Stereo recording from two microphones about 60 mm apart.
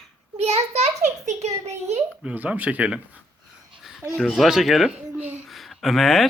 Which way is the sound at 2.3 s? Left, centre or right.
Right.